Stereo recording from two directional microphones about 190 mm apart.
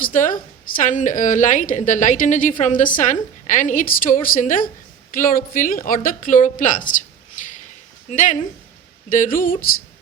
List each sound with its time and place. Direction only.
0.0 s a woman's voice: 45° left (ahead or behind)
8.1 s a woman's voice: 40° left (ahead or behind)